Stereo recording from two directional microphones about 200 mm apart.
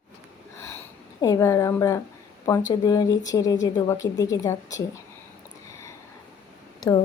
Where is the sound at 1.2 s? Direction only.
15° left (ahead or behind).